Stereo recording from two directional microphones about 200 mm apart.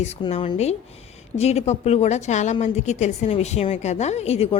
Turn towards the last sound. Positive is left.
turn(degrees=30)  # may be behind; listen again after turning